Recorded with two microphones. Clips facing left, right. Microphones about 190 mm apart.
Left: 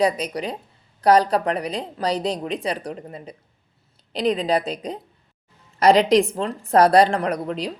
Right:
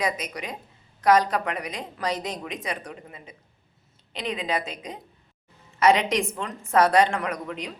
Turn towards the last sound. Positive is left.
turn(degrees=35)  # may be behind; listen again after turning